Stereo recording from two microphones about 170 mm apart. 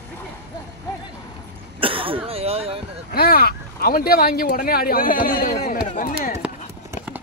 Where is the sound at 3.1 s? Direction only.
60° left (ahead or behind).